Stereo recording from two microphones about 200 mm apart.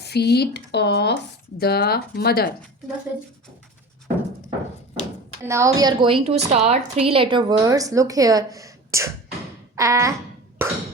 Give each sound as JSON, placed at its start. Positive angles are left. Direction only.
{"t": 0.0, "sound": "speech", "side_deg": 55}
{"t": 5.4, "sound": "a woman's voice", "side_deg": -15}
{"t": 9.7, "sound": "a sound", "side_deg": -15}
{"t": 10.6, "sound": "music", "side_deg": -10}